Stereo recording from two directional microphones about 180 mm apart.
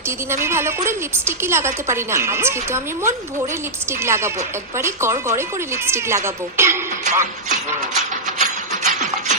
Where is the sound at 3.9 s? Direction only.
15° right (ahead or behind).